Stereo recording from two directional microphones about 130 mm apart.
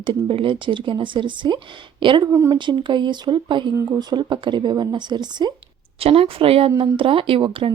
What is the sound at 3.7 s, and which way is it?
Speech, 25° right (ahead or behind).